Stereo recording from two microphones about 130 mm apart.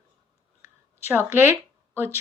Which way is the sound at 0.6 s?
20° right (ahead or behind).